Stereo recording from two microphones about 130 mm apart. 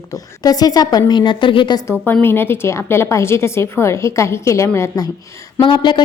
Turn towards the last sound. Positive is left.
turn(degrees=40)  # may be behind; listen again after turning